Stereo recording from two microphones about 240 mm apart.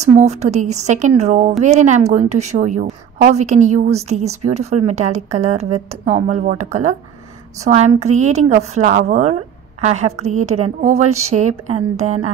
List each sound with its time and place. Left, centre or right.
0.0 s a woman's voice: right